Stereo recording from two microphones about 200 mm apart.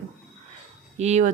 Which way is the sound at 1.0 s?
35° right (ahead or behind).